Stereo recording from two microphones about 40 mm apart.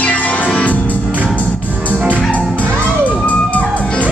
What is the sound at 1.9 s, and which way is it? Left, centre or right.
Music, right.